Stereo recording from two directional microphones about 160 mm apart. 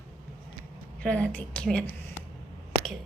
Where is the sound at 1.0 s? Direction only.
10° left (ahead or behind).